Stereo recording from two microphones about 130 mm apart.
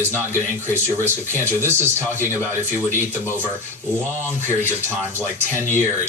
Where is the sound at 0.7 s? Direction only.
20° right (ahead or behind).